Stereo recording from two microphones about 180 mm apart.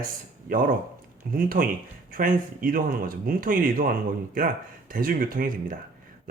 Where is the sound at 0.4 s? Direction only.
50° right (ahead or behind).